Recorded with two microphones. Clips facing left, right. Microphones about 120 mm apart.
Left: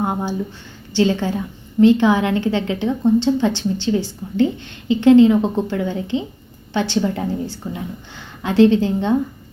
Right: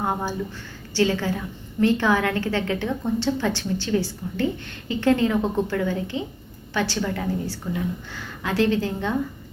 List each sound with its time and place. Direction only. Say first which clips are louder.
0.0 s a woman's voice: left 4 dB; 20° left (ahead or behind)